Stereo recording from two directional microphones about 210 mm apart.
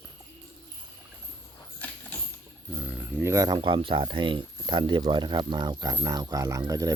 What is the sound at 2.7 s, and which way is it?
Speech, 5° right (ahead or behind).